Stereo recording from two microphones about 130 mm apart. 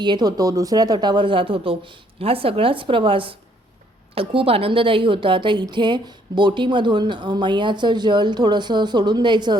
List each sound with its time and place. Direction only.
0.0 s a woman's voice: 35° right (ahead or behind)